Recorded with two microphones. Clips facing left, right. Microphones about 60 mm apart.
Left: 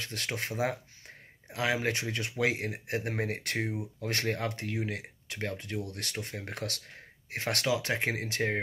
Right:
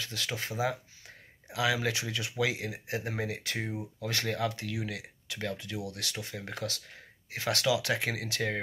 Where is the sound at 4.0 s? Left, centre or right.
Left.